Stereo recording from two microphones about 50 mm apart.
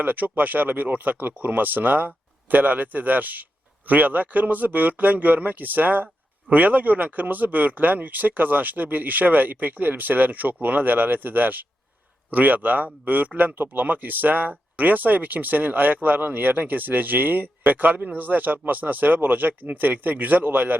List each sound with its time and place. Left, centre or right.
0.0 s speech: right